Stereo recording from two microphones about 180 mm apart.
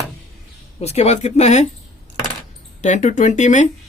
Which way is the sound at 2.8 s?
40° left (ahead or behind).